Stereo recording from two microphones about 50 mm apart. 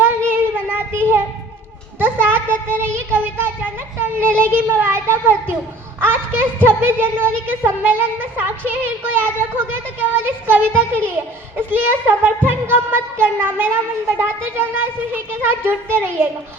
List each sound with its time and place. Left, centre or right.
0.0 s child singing: right
2.0 s a sound: right
2.7 s a woman's voice: right